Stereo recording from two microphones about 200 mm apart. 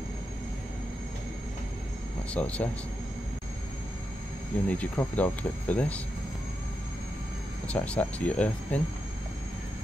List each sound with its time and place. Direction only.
2.3 s speech: 5° left (ahead or behind)
4.6 s speech: 5° left (ahead or behind)
7.6 s speech: 5° left (ahead or behind)